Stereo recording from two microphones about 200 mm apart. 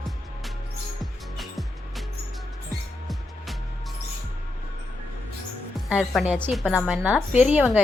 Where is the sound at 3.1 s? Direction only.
Centre (ahead or behind).